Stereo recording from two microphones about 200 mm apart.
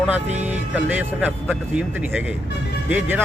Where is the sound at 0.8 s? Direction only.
10° right (ahead or behind).